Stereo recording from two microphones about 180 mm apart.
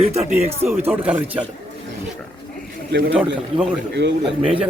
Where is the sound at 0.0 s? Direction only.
35° right (ahead or behind).